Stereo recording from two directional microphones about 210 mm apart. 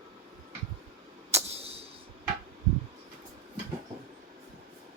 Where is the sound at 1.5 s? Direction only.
30° right (ahead or behind).